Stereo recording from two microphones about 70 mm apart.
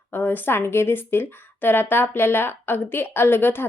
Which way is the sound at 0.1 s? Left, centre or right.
Left.